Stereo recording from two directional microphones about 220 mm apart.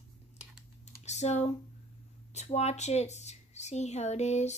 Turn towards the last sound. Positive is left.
turn(degrees=30)  # may be behind; listen again after turning